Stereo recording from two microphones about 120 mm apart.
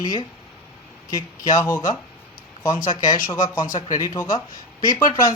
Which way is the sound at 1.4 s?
25° left (ahead or behind).